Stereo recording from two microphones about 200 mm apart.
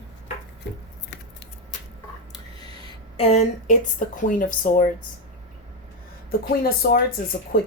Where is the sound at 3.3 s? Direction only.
35° left (ahead or behind).